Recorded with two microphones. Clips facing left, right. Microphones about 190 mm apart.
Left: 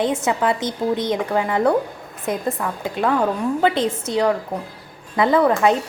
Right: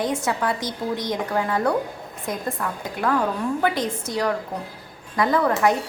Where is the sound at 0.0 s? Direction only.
25° left (ahead or behind).